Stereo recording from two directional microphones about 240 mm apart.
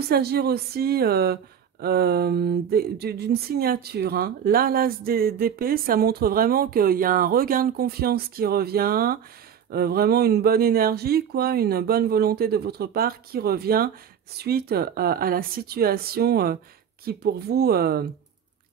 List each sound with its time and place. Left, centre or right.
0.0 s speech: right